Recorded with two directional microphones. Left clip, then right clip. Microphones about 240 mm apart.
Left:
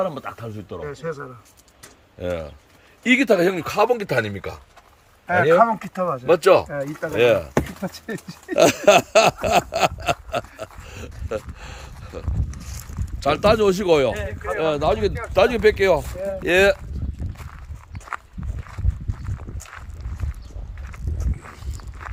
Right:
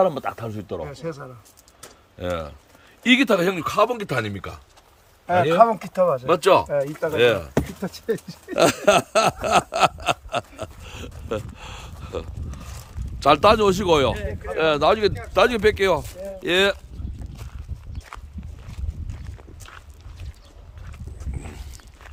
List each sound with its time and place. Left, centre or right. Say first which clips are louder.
0.0 s speech: right 5 dB; centre
0.9 s speech: left 3 dB; right
2.1 s speech: left 1 dB; centre
5.2 s speech: left 1 dB; right
6.2 s speech: left 5 dB; centre
6.7 s speech: right 4 dB; right
7.2 s speech: left 2 dB; centre
7.8 s speech: right 4 dB; right
8.5 s a sound: left 3 dB; centre
13.1 s speech: right 2 dB; centre